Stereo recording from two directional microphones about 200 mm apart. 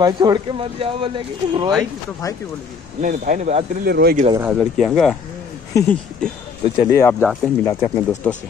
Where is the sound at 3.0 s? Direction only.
40° right (ahead or behind).